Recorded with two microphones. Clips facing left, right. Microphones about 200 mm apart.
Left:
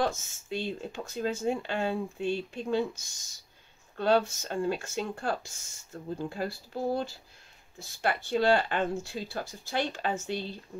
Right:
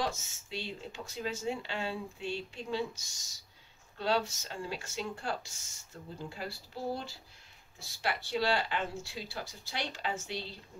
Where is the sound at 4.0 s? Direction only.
55° left (ahead or behind).